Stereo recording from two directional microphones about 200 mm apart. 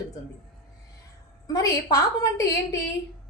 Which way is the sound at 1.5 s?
20° left (ahead or behind).